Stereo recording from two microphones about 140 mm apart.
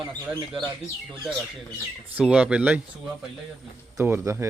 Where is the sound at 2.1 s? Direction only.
5° right (ahead or behind).